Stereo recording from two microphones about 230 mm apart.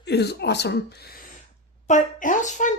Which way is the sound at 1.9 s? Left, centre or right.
Left.